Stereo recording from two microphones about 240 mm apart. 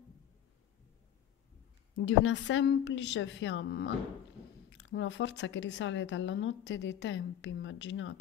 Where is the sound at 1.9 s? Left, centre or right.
Left.